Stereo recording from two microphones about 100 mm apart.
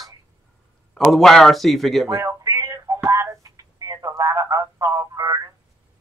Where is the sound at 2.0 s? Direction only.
35° right (ahead or behind).